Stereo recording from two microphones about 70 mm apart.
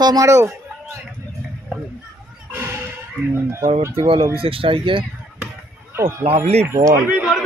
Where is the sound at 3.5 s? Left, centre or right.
Right.